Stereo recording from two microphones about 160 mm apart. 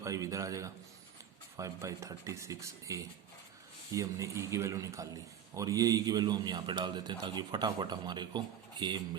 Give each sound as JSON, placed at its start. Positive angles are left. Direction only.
{"t": 0.0, "sound": "a man's voice", "side_deg": -20}